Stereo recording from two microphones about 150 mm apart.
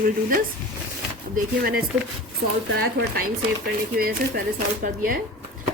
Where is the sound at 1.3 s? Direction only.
85° right.